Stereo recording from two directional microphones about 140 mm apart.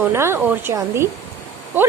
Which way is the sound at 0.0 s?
20° right (ahead or behind).